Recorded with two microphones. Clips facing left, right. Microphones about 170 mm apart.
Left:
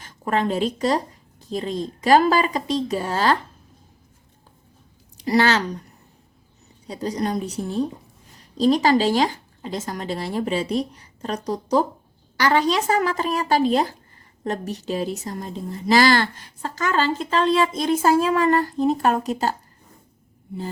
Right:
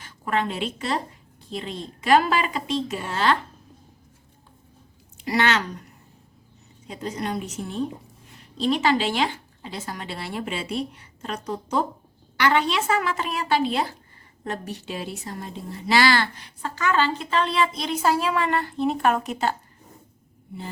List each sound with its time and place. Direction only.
0.0 s a woman's voice: 40° left (ahead or behind)
5.1 s speech: 35° left (ahead or behind)
6.8 s a woman's voice: 35° left (ahead or behind)